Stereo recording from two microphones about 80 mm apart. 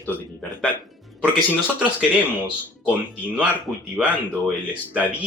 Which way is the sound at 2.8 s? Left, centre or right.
Centre.